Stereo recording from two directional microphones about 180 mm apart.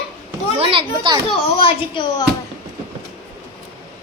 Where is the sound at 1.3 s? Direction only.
30° left (ahead or behind).